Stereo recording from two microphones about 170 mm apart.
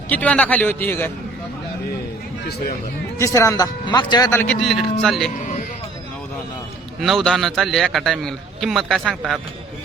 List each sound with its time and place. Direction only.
0.1 s a man's voice: 10° left (ahead or behind)
3.2 s speech: 15° left (ahead or behind)
4.6 s a man's voice: centre (ahead or behind)
7.0 s a man's voice: centre (ahead or behind)